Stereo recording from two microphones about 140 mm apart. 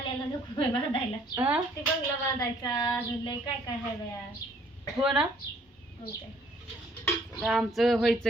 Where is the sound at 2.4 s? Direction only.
30° left (ahead or behind).